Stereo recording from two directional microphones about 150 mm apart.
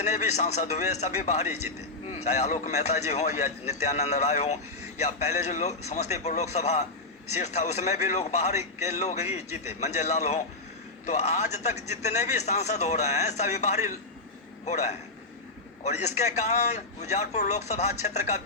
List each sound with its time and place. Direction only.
0.0 s a man's voice: 50° left (ahead or behind)